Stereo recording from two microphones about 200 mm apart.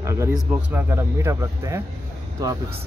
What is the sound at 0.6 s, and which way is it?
Speech, 10° right (ahead or behind).